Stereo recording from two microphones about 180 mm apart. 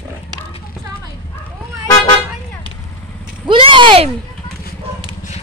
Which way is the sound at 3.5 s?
30° right (ahead or behind).